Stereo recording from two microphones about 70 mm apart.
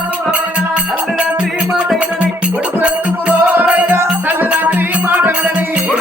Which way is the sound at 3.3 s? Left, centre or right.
Right.